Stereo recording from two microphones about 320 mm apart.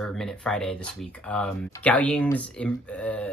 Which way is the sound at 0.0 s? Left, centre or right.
Centre.